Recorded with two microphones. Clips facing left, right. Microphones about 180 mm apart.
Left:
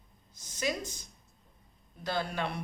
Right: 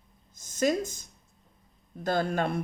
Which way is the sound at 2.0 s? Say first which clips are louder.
Right 6 dB; 45° right (ahead or behind).